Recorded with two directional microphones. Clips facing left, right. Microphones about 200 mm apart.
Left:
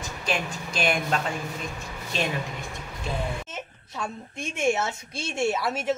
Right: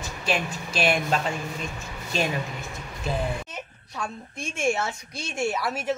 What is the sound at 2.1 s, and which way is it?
Speech, centre (ahead or behind).